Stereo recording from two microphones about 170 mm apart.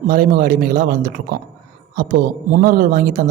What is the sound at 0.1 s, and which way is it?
Speech, 60° right (ahead or behind).